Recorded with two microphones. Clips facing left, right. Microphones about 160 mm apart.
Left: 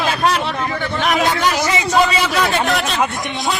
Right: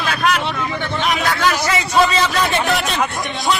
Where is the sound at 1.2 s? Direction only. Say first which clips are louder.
Left 1 dB; 20° left (ahead or behind).